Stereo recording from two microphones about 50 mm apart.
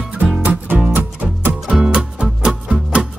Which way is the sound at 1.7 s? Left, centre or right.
Centre.